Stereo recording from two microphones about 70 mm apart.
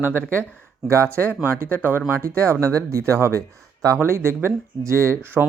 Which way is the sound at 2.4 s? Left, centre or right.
Right.